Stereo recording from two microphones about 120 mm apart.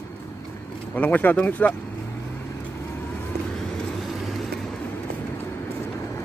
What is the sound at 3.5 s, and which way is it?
Vehicle, 5° left (ahead or behind).